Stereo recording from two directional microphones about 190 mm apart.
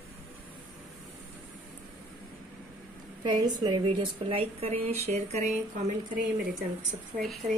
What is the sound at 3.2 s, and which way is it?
A woman's voice, 25° right (ahead or behind).